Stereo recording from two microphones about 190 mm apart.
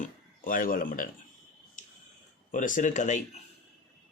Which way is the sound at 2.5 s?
45° left (ahead or behind).